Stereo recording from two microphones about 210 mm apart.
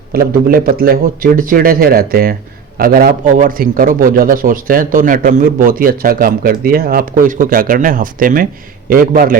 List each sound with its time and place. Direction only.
0.1 s a man's voice: 45° right (ahead or behind)